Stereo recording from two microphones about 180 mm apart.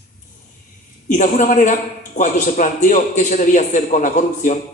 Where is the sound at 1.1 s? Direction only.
45° left (ahead or behind).